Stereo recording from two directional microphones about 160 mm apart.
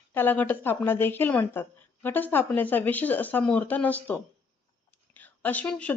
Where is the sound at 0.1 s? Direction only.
10° left (ahead or behind).